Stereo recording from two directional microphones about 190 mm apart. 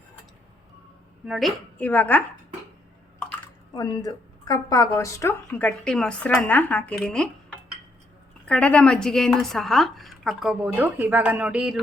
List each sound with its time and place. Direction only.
1.2 s speech: centre (ahead or behind)
3.8 s a woman's voice: 20° left (ahead or behind); by 7.3 s 5° left (ahead or behind)
8.4 s a woman's voice: 5° left (ahead or behind)